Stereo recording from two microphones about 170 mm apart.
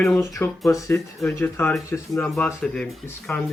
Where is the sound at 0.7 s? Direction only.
20° left (ahead or behind).